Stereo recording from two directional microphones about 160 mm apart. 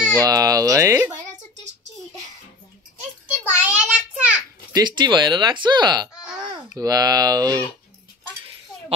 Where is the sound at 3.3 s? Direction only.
10° right (ahead or behind).